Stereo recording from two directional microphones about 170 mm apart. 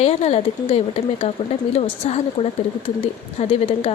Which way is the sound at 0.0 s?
40° left (ahead or behind).